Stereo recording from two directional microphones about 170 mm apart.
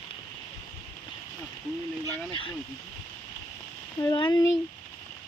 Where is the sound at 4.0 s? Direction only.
20° left (ahead or behind).